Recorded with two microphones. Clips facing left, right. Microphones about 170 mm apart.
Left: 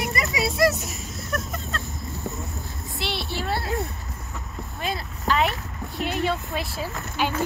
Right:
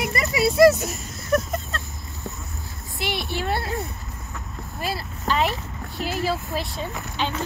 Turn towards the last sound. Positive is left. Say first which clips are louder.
# left 2 dB
turn(degrees=10)  # may be behind; listen again after turning